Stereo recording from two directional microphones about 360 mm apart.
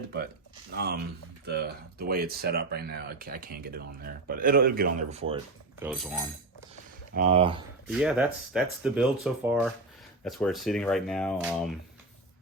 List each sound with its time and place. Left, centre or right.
0.7 s speech: right
5.8 s speech: centre
7.2 s speech: centre
7.9 s speech: centre